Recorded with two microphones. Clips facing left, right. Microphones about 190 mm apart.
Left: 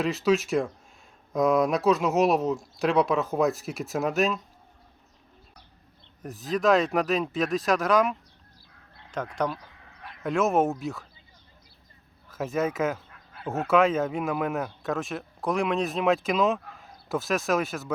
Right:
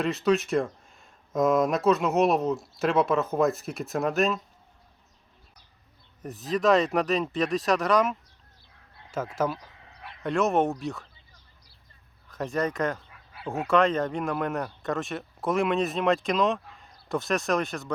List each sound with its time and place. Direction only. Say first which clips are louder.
0.0 s speech: even; centre (ahead or behind)
6.2 s speech: even; centre (ahead or behind)
12.3 s speech: left 1 dB; 5° left (ahead or behind)